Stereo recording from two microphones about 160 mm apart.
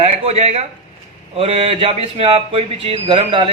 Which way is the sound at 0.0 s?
40° right (ahead or behind).